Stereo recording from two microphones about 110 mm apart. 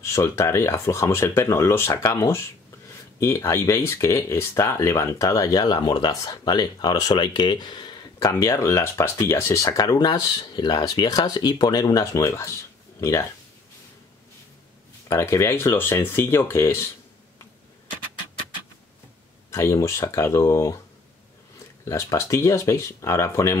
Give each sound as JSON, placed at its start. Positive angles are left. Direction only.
{"t": 0.0, "sound": "speech", "side_deg": 25}
{"t": 8.2, "sound": "speech", "side_deg": 30}
{"t": 15.0, "sound": "speech", "side_deg": 25}
{"t": 19.5, "sound": "speech", "side_deg": 25}
{"t": 21.8, "sound": "speech", "side_deg": 30}